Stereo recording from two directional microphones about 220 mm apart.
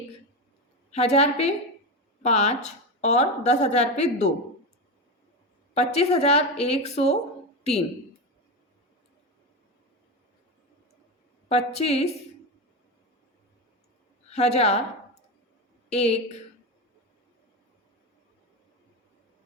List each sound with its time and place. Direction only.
0.9 s a woman's voice: 30° left (ahead or behind)
5.7 s a woman's voice: 30° left (ahead or behind)
11.4 s a woman's voice: 30° left (ahead or behind)
14.3 s a woman's voice: 30° left (ahead or behind)
15.9 s a woman's voice: 30° left (ahead or behind)